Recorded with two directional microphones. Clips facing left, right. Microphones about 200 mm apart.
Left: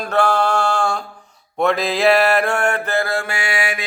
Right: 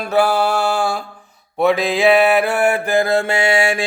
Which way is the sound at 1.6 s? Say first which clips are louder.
Right 2 dB; centre (ahead or behind).